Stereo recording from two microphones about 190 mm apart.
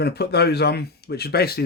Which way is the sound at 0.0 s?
60° left (ahead or behind).